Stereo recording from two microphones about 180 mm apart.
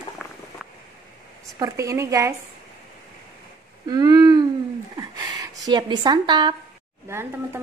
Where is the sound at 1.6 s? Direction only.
15° right (ahead or behind).